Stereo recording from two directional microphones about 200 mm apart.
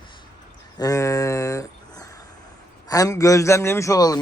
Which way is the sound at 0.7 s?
15° left (ahead or behind).